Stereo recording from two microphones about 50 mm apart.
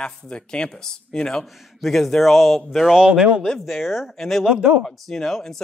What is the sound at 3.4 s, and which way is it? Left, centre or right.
Speech, centre.